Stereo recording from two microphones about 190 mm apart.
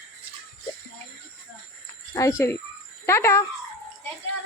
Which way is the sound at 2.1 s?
15° left (ahead or behind).